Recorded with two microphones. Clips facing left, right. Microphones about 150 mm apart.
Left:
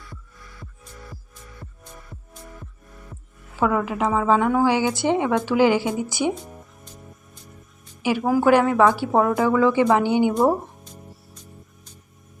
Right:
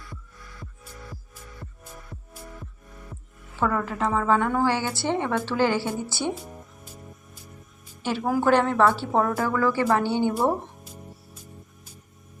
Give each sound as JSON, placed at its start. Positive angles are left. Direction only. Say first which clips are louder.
{"t": 1.1, "sound": "music", "louder": "even", "side_deg": 0}
{"t": 3.6, "sound": "a woman's voice", "louder": "left 4 dB", "side_deg": 10}
{"t": 6.3, "sound": "music", "louder": "left 1 dB", "side_deg": 0}
{"t": 8.0, "sound": "a woman's voice", "louder": "left 4 dB", "side_deg": 10}